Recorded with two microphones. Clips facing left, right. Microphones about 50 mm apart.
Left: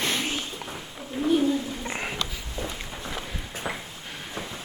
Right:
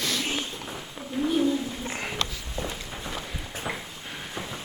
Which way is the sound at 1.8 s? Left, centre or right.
Centre.